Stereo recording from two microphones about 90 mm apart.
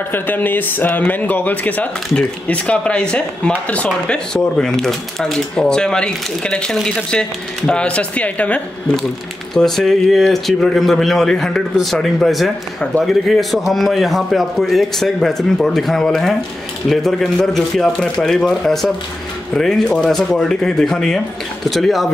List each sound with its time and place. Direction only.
0.1 s speech: 20° left (ahead or behind)
9.5 s speech: 5° left (ahead or behind)